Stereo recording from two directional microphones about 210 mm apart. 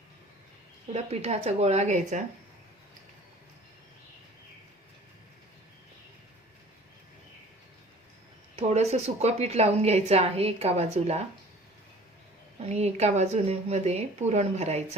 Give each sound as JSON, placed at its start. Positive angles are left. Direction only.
{"t": 0.9, "sound": "speech", "side_deg": -30}
{"t": 8.5, "sound": "speech", "side_deg": -30}
{"t": 12.6, "sound": "speech", "side_deg": -30}